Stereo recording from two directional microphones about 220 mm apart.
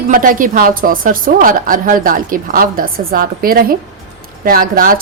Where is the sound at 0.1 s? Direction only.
40° right (ahead or behind).